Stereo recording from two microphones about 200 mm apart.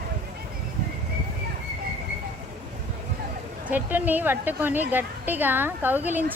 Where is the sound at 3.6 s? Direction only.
10° right (ahead or behind).